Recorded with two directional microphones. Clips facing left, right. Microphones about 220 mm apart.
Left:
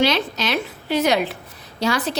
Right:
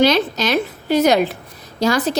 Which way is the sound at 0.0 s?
40° right (ahead or behind).